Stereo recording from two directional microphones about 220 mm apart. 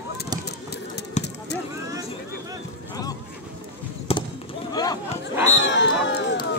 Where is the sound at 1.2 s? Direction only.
30° left (ahead or behind).